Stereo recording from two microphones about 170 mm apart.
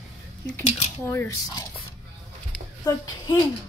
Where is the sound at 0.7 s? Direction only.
40° left (ahead or behind).